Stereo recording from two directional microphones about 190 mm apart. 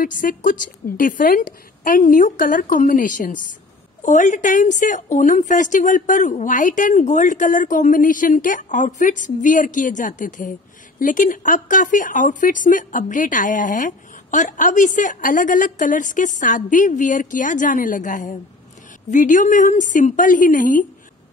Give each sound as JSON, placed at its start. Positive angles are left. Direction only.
{"t": 0.0, "sound": "a woman's voice", "side_deg": 45}